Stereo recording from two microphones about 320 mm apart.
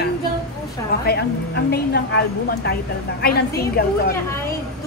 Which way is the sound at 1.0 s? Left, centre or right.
Left.